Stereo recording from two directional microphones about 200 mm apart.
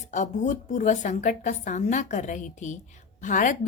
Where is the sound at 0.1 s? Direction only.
35° left (ahead or behind).